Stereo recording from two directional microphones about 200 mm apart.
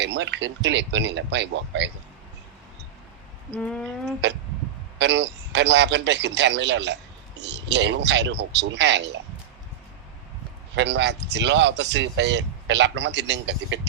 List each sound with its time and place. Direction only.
0.0 s a man's voice: 60° right (ahead or behind)
3.5 s a sound: 5° left (ahead or behind)
4.9 s a man's voice: 60° right (ahead or behind)
10.8 s a man's voice: 60° right (ahead or behind)